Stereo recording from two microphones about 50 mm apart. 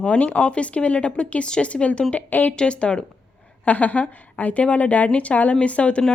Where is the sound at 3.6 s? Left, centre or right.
Left.